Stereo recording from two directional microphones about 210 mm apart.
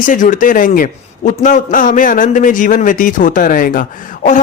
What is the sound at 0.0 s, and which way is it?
A man's voice, 40° left (ahead or behind).